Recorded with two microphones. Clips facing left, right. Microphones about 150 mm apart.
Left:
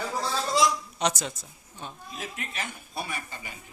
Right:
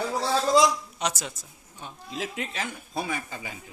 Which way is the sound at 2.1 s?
90° right.